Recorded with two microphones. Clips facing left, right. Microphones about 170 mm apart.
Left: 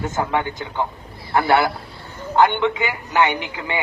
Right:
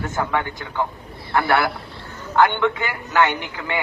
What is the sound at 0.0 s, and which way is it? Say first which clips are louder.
A man's voice: left 2 dB; 20° left (ahead or behind).